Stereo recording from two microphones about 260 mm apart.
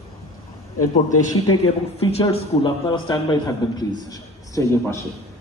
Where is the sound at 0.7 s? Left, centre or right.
Left.